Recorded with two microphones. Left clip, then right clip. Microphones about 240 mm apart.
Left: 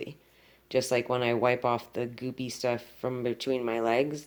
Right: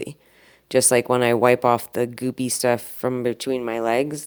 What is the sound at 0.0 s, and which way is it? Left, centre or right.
Speech, right.